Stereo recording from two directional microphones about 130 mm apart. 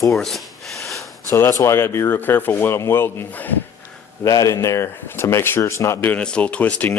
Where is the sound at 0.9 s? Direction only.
25° left (ahead or behind).